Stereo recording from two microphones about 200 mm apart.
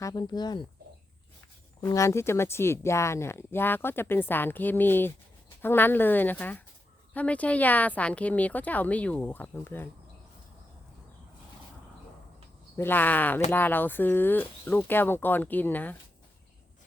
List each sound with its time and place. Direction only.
0.0 s speech: 20° left (ahead or behind)
1.8 s speech: 15° left (ahead or behind)
12.7 s speech: 10° left (ahead or behind)